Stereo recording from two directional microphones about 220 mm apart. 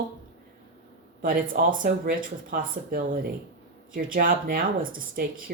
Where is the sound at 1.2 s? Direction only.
40° right (ahead or behind).